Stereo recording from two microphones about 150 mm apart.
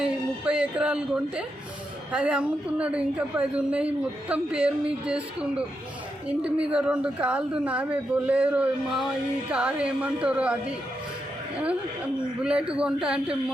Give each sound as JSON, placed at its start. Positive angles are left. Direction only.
{"t": 0.0, "sound": "speech", "side_deg": -5}
{"t": 12.4, "sound": "speech", "side_deg": -5}